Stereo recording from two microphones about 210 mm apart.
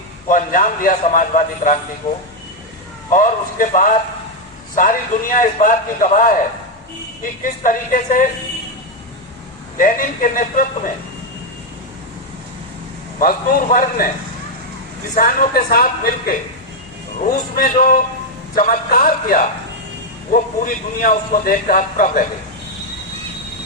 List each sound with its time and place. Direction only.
0.3 s a man's voice: 40° left (ahead or behind)
3.1 s a man's voice: 40° left (ahead or behind)
9.7 s a man's voice: 40° left (ahead or behind)
13.1 s a woman's voice: 45° left (ahead or behind)
15.1 s a woman's voice: 40° left (ahead or behind)